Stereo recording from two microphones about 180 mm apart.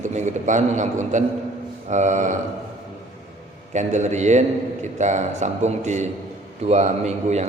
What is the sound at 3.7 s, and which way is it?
A man's voice, 40° right (ahead or behind).